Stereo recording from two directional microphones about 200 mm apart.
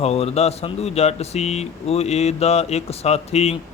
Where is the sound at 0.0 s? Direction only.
30° left (ahead or behind).